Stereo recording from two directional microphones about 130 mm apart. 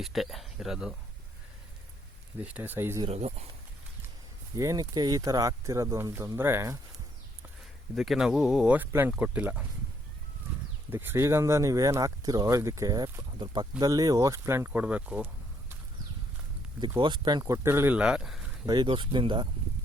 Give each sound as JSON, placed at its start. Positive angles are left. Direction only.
{"t": 0.0, "sound": "speech", "side_deg": 0}
{"t": 2.4, "sound": "speech", "side_deg": -10}
{"t": 3.1, "sound": "speech", "side_deg": -55}
{"t": 4.5, "sound": "speech", "side_deg": -25}
{"t": 7.9, "sound": "speech", "side_deg": 0}
{"t": 10.9, "sound": "speech", "side_deg": -15}
{"t": 17.0, "sound": "speech", "side_deg": -35}
{"t": 17.4, "sound": "speech", "side_deg": -20}
{"t": 18.6, "sound": "speech", "side_deg": -35}